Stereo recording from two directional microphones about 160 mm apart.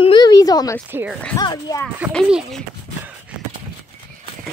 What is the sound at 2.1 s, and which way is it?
Speech, centre (ahead or behind).